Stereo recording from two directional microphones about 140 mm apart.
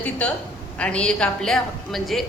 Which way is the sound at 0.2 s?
10° left (ahead or behind).